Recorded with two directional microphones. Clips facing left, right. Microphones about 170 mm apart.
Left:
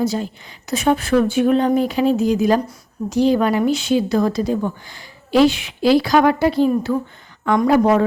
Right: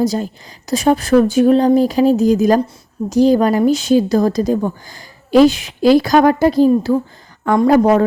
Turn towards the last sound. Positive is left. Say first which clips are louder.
# right 3 dB
turn(degrees=-40)  # may be behind; listen again after turning